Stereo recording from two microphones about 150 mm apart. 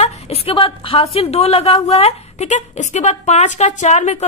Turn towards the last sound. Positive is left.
turn(degrees=50)  # may be behind; listen again after turning